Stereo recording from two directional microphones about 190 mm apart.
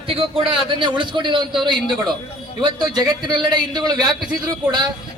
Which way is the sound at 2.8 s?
20° right (ahead or behind).